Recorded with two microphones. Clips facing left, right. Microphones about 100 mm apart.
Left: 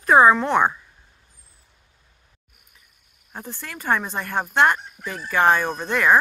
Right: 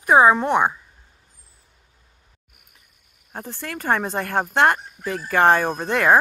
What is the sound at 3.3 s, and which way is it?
Speech, 40° right (ahead or behind).